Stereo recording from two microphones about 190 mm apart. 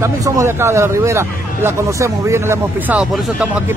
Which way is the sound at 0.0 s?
15° right (ahead or behind).